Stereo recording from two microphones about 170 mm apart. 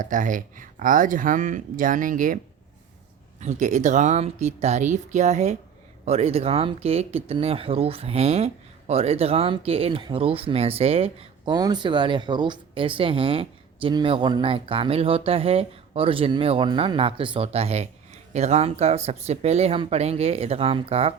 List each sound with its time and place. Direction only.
0.0 s speech: 50° right (ahead or behind)
3.4 s speech: 45° right (ahead or behind)